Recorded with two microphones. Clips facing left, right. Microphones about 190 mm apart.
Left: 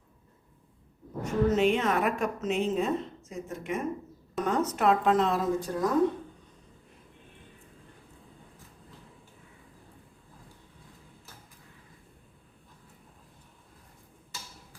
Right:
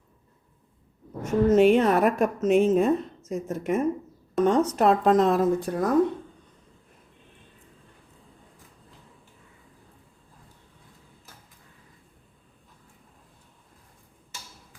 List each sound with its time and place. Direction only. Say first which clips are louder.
1.2 s a woman's voice: right 6 dB; 45° right (ahead or behind)